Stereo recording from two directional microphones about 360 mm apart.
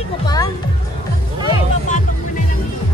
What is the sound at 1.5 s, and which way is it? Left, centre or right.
Music, centre.